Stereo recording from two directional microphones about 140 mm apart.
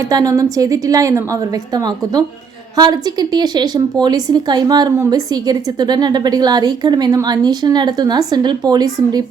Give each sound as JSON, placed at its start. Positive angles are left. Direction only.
{"t": 0.1, "sound": "a woman's voice", "side_deg": -25}